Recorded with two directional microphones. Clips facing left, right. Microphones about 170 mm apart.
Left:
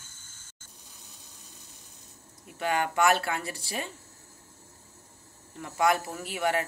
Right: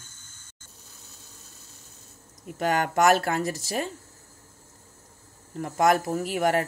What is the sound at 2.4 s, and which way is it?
Speech, 40° right (ahead or behind).